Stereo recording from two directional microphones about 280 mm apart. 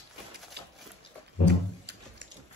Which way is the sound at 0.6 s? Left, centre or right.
Right.